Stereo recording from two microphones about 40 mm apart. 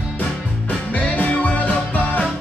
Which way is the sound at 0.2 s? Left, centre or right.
Left.